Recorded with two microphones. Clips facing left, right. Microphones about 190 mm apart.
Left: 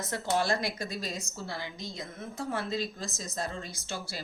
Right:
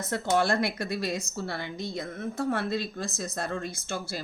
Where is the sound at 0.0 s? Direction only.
60° right (ahead or behind).